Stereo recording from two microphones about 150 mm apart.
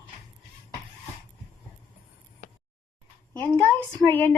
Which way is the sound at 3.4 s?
15° left (ahead or behind).